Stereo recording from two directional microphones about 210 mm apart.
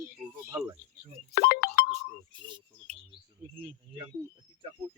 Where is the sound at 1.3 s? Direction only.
45° left (ahead or behind).